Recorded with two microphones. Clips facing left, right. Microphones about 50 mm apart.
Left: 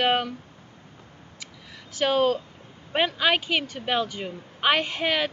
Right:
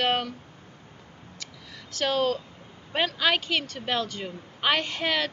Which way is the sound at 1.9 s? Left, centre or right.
Centre.